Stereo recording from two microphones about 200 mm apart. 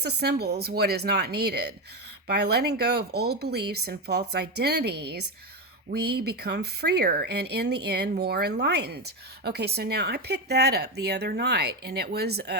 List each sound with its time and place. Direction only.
0.0 s speech: 55° right (ahead or behind)